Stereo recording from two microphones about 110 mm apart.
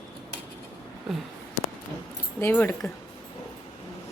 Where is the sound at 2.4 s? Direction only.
20° left (ahead or behind).